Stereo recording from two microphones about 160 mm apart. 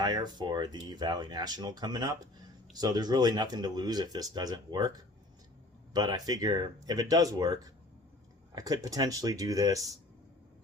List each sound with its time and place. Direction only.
0.0 s speech: 25° right (ahead or behind)